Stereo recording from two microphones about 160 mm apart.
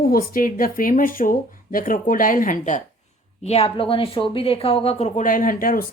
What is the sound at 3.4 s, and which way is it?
Speech, 40° left (ahead or behind).